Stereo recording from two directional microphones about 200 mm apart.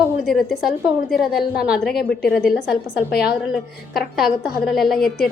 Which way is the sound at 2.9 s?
55° left (ahead or behind).